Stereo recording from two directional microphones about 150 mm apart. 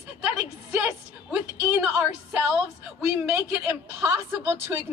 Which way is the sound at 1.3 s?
10° right (ahead or behind).